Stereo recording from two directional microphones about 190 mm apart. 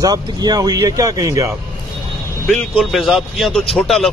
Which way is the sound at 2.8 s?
Centre (ahead or behind).